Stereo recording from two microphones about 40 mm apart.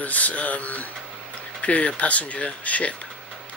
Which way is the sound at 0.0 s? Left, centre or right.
Left.